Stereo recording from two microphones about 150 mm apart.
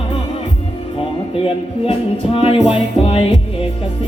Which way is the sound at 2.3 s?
40° left (ahead or behind).